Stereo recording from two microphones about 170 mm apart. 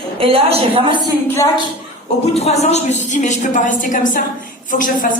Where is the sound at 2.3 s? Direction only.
40° left (ahead or behind).